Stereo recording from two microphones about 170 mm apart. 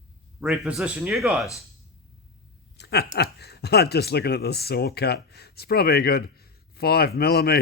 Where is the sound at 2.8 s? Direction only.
80° left.